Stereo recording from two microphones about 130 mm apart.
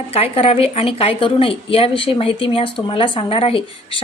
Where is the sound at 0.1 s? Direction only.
50° left (ahead or behind).